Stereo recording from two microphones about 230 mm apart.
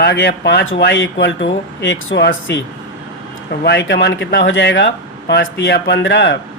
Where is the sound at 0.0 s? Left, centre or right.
Left.